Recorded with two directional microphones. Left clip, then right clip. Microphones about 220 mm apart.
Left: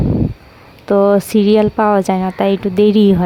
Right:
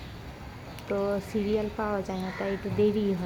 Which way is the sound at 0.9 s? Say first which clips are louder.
Left 18 dB; 45° left (ahead or behind).